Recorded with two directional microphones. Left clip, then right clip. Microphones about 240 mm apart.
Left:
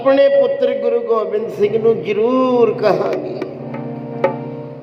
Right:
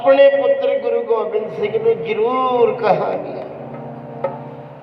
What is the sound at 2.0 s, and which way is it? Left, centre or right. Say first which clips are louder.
Speech: left 2 dB; centre.